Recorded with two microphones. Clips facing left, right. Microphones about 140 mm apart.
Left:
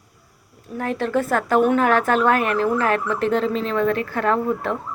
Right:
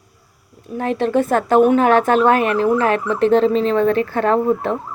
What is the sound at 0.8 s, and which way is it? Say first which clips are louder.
A woman's voice: right 4 dB; 20° right (ahead or behind).